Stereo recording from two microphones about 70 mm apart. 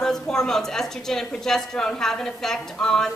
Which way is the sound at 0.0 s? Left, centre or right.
Centre.